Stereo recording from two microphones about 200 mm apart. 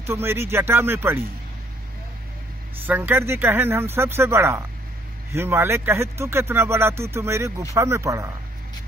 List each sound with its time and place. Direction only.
0.0 s speech: 10° right (ahead or behind)
2.9 s speech: 10° right (ahead or behind)